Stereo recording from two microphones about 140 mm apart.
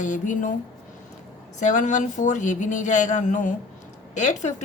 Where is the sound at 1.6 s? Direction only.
60° left (ahead or behind).